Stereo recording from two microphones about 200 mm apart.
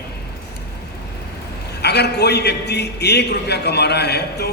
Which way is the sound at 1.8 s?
55° left (ahead or behind).